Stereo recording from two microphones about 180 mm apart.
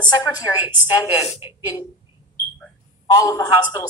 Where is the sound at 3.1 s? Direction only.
20° left (ahead or behind).